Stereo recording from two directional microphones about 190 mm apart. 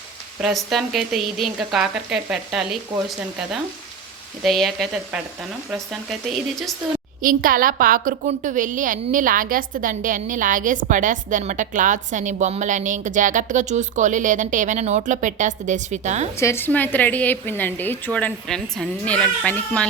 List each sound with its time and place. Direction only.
0.4 s a woman's voice: centre (ahead or behind)
4.4 s a woman's voice: centre (ahead or behind)
7.2 s a woman's voice: 45° right (ahead or behind)
16.4 s speech: 15° left (ahead or behind)